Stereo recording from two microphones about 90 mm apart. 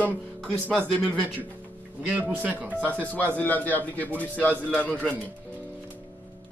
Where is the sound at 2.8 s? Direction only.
15° left (ahead or behind).